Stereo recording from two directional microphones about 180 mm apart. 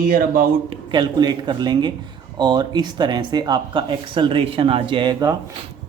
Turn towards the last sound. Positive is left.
turn(degrees=-20)  # may be behind; listen again after turning